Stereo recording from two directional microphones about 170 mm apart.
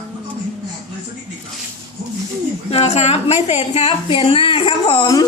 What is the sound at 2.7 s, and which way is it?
A woman's voice, 40° left (ahead or behind).